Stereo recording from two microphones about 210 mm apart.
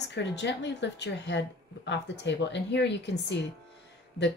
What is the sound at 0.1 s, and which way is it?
A woman's voice, 55° left (ahead or behind).